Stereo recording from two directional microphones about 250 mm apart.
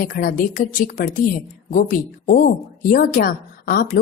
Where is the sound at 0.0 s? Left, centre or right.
Left.